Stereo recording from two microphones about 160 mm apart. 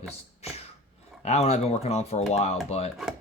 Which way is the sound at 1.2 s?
45° left (ahead or behind).